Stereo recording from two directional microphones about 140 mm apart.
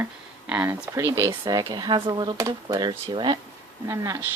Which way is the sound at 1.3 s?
30° right (ahead or behind).